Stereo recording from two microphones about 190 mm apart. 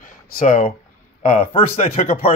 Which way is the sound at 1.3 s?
30° left (ahead or behind).